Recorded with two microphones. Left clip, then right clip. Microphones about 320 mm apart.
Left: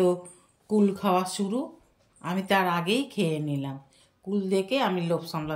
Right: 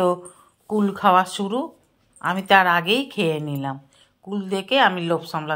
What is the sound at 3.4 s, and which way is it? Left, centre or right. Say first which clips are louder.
Speech: right 5 dB; right.